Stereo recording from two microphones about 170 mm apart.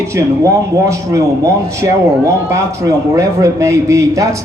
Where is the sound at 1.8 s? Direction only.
20° right (ahead or behind).